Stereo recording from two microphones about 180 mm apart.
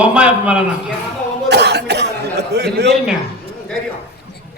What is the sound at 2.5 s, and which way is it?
Speech, 70° right (ahead or behind).